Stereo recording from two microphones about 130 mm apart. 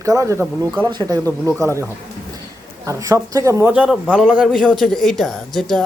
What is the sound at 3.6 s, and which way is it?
Speech, 10° right (ahead or behind).